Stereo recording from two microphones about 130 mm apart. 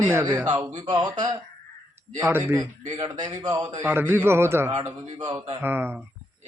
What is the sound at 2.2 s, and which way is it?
Speech, 15° right (ahead or behind).